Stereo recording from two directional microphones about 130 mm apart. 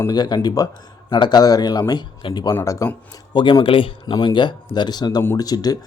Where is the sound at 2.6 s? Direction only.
20° left (ahead or behind).